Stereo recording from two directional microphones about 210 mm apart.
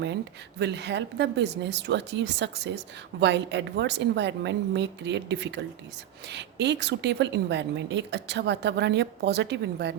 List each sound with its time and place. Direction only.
0.6 s speech: 55° right (ahead or behind)